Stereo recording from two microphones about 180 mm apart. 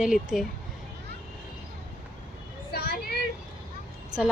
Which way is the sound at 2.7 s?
60° left (ahead or behind).